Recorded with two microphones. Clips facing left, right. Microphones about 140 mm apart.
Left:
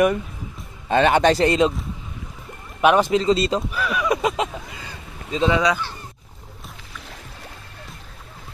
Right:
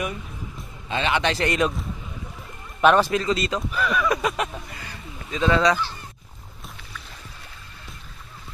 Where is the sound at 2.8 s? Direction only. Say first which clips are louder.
Left 1 dB; 10° left (ahead or behind).